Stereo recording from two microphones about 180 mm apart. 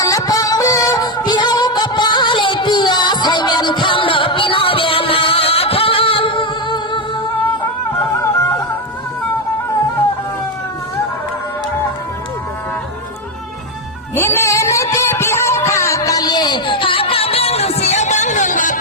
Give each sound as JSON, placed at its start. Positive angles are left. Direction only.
{"t": 0.0, "sound": "music", "side_deg": 20}
{"t": 14.2, "sound": "music", "side_deg": 15}